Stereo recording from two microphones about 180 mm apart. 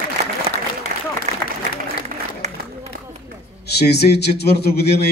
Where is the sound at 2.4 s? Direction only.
35° right (ahead or behind).